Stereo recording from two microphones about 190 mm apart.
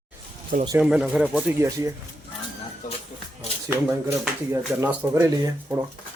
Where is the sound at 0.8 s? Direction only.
5° right (ahead or behind).